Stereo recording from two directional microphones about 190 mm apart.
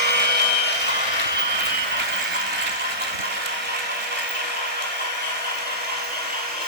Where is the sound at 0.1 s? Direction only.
60° right (ahead or behind).